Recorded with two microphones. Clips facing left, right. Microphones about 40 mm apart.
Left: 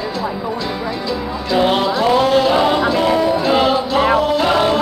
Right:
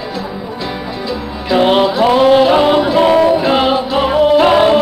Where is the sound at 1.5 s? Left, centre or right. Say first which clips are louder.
Right 4 dB; centre.